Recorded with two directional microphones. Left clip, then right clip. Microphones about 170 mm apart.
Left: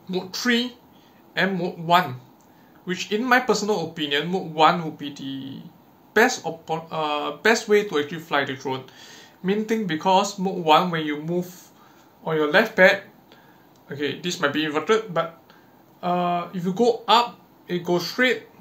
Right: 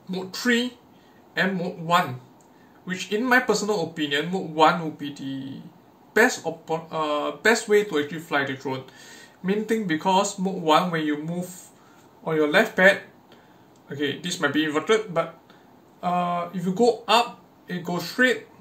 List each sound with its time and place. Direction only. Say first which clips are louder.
0.1 s speech: left 1 dB; 15° left (ahead or behind)